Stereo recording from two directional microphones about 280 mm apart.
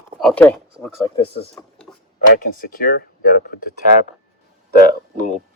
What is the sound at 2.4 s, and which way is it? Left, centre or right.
Speech, left.